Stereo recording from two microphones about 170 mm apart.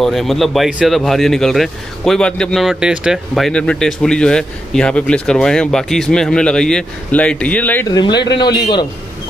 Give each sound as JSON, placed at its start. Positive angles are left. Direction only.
{"t": 0.0, "sound": "speech", "side_deg": 0}
{"t": 7.9, "sound": "a man's voice", "side_deg": 25}